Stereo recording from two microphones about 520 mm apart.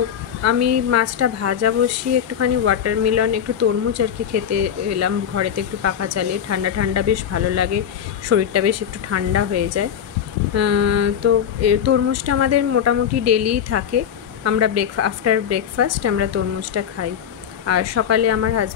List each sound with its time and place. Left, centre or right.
0.4 s a woman's voice: right